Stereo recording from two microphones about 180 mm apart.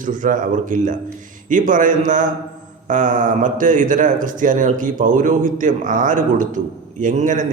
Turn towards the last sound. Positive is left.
turn(degrees=-45)  # may be behind; listen again after turning